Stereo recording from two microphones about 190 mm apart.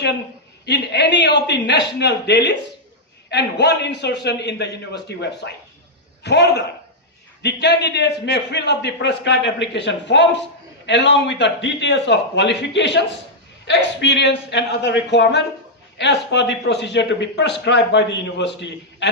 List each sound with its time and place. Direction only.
0.6 s a man's voice: 65° left (ahead or behind)